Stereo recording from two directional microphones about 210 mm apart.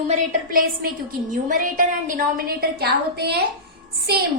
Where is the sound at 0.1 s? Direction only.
40° right (ahead or behind).